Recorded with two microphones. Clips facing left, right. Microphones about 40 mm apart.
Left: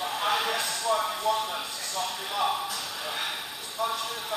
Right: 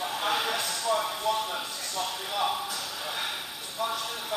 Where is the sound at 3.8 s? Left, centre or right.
Left.